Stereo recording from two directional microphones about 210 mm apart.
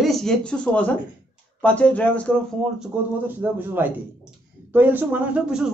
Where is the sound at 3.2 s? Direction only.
10° right (ahead or behind).